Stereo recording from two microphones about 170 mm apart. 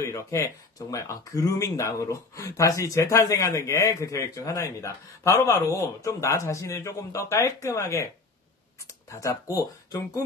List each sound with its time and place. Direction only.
0.0 s speech: 15° left (ahead or behind)
9.1 s speech: 20° left (ahead or behind)